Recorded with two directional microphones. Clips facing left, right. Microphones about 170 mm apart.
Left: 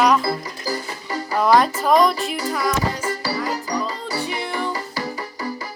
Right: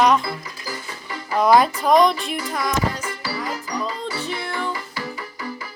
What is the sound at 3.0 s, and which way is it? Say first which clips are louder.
Music: left 4 dB; 35° left (ahead or behind).